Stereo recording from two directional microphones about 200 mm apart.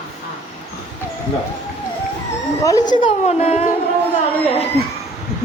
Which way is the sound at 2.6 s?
15° left (ahead or behind).